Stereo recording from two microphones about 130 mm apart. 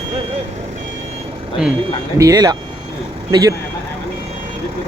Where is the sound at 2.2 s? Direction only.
30° right (ahead or behind).